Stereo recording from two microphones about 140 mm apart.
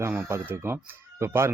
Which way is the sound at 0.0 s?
15° right (ahead or behind).